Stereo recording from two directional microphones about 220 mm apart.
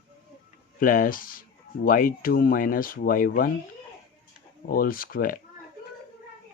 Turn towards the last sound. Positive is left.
turn(degrees=40)  # may be behind; listen again after turning